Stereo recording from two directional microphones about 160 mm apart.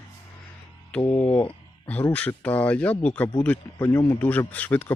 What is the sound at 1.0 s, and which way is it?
Speech, 20° left (ahead or behind).